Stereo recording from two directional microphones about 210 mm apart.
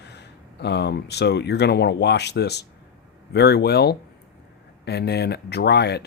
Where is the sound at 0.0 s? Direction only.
55° left (ahead or behind).